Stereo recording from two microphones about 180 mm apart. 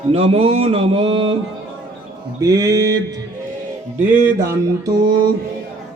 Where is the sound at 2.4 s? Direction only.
20° right (ahead or behind).